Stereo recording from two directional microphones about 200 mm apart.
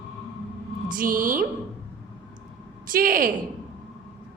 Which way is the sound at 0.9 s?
45° right (ahead or behind).